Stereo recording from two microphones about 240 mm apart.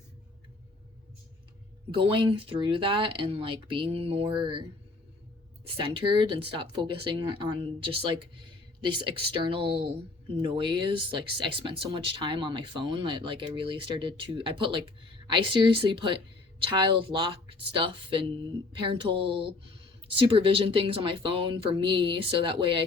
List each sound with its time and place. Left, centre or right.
1.9 s speech: right
5.6 s speech: right